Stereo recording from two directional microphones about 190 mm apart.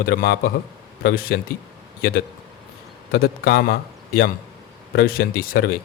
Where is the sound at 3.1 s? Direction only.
55° left (ahead or behind).